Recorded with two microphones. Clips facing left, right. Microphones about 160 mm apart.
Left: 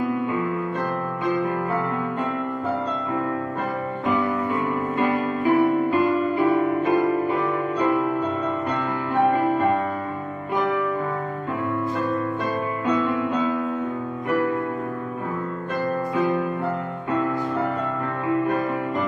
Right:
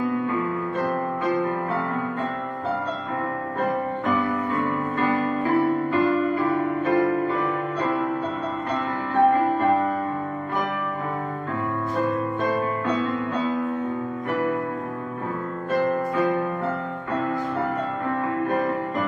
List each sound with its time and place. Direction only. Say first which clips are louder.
4.9 s music: even; 15° left (ahead or behind)